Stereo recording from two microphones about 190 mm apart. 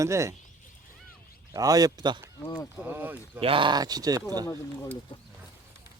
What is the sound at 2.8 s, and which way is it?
Speech, 10° right (ahead or behind).